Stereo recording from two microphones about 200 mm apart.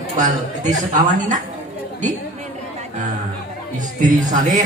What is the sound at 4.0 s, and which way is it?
Speech, 40° right (ahead or behind).